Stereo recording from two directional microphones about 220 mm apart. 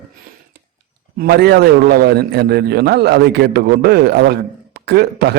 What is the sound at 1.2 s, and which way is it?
A man's voice, 45° right (ahead or behind).